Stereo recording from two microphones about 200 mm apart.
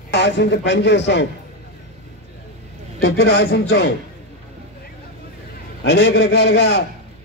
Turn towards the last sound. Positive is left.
turn(degrees=55)  # may be behind; listen again after turning